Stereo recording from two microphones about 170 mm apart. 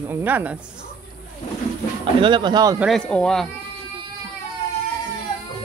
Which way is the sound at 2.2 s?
25° right (ahead or behind).